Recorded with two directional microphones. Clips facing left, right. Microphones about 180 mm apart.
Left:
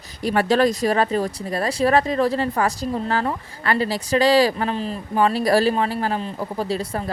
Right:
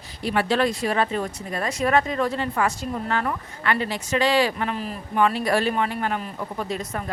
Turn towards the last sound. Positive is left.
turn(degrees=35)  # may be behind; listen again after turning